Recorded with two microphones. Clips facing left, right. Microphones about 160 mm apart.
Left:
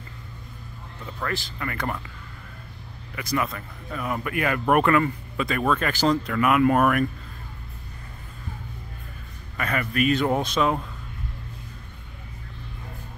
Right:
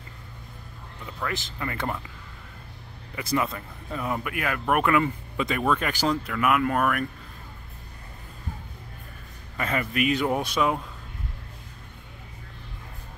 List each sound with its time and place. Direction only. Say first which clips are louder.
1.2 s speech: left 1 dB; 20° right (ahead or behind)
3.2 s speech: even; 25° right (ahead or behind)
4.2 s speech: left 4 dB; 5° right (ahead or behind)
4.9 s speech: left 1 dB; 15° right (ahead or behind)
6.6 s speech: left 5 dB; 10° left (ahead or behind)
9.6 s speech: left 1 dB; 25° right (ahead or behind)